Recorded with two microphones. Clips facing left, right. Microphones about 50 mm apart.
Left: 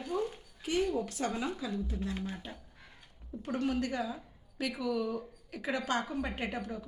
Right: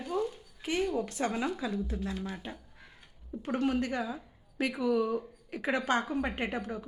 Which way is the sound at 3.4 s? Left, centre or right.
Centre.